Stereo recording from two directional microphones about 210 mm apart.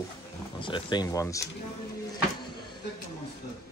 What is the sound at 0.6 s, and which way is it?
Speech, 25° left (ahead or behind).